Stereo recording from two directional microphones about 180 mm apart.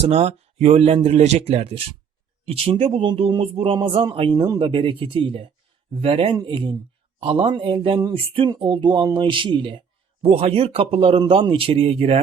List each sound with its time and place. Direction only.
0.0 s a man's voice: 35° right (ahead or behind)